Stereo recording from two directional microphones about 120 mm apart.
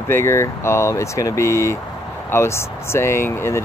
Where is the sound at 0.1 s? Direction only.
20° left (ahead or behind).